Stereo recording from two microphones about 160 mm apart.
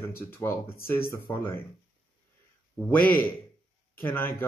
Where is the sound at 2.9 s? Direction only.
10° left (ahead or behind).